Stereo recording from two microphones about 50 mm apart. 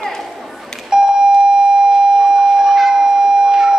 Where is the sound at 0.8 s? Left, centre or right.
Centre.